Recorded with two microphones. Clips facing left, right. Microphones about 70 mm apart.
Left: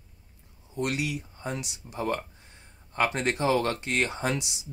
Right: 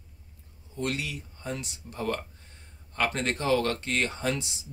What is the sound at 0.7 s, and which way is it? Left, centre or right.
Speech, centre.